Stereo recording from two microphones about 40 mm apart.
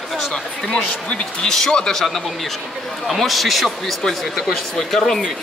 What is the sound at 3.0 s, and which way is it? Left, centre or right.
Speech, centre.